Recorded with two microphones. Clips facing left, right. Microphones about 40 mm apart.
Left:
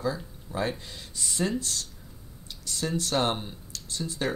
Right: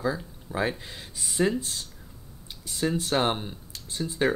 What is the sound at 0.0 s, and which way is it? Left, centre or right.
Speech, centre.